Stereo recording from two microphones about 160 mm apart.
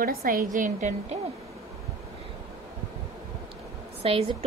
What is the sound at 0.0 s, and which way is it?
Speech, 65° right (ahead or behind).